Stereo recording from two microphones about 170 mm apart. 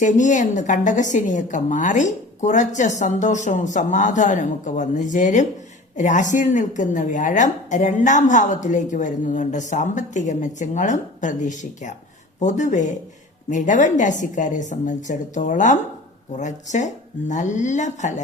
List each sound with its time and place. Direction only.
0.0 s a woman's voice: 45° left (ahead or behind)